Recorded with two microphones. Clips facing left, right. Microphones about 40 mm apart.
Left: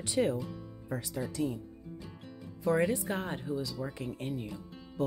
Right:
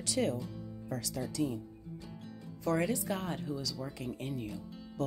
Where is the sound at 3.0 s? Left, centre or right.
Left.